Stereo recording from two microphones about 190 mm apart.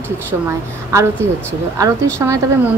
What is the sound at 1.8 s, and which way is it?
Speech, 15° right (ahead or behind).